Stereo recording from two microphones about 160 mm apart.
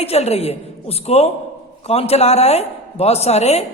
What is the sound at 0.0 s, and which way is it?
A woman's voice, 40° left (ahead or behind).